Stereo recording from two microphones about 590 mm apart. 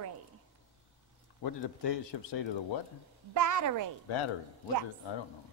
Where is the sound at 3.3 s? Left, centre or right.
Right.